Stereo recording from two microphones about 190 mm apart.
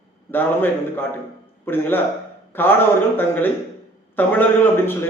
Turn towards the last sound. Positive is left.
turn(degrees=10)  # may be behind; listen again after turning